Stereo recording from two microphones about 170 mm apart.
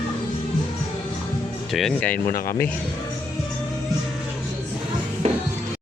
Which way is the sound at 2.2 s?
60° left (ahead or behind).